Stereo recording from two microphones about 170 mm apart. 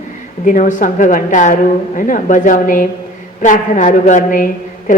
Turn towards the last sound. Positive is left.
turn(degrees=50)  # may be behind; listen again after turning